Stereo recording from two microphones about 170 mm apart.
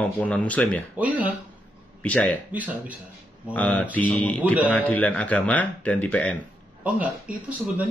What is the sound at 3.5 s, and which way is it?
Speech, 10° left (ahead or behind).